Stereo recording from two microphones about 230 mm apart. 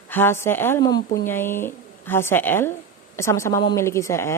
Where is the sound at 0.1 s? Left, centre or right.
Centre.